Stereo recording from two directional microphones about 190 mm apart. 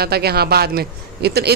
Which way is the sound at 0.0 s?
55° right (ahead or behind).